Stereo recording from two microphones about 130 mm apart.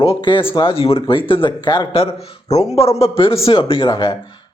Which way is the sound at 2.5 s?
55° left (ahead or behind).